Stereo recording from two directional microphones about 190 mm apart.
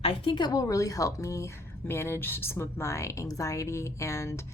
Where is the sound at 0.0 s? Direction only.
25° left (ahead or behind).